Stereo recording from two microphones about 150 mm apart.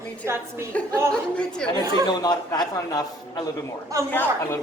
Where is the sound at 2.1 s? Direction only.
30° left (ahead or behind).